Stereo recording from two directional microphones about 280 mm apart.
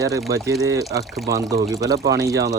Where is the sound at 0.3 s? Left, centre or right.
Centre.